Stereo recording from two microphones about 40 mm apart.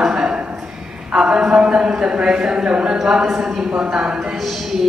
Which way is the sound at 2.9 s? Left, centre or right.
Centre.